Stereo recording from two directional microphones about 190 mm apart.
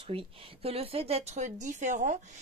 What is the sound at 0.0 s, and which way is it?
Speech, 30° right (ahead or behind).